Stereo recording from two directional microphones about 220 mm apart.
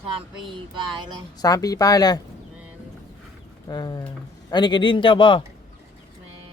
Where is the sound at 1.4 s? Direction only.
15° left (ahead or behind).